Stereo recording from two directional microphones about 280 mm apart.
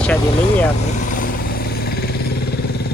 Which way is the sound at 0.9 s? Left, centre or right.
Left.